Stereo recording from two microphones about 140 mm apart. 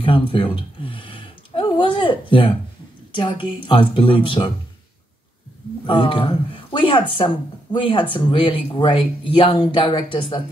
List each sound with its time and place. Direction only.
0.0 s a sound: 40° left (ahead or behind)
3.2 s speech: 35° left (ahead or behind)
5.9 s speech: 40° left (ahead or behind)